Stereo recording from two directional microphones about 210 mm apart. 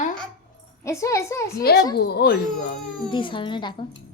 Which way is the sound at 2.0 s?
50° left (ahead or behind).